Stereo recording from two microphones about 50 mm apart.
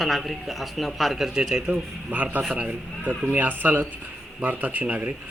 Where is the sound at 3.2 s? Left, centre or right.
Right.